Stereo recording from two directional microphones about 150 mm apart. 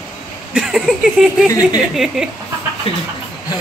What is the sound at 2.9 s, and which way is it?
Speech, 40° left (ahead or behind).